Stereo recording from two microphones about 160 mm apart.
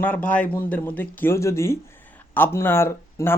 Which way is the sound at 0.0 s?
10° left (ahead or behind).